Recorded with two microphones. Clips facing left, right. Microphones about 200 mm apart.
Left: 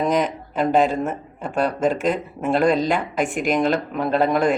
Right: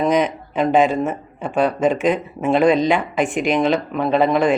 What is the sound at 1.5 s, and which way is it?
Speech, 45° left (ahead or behind).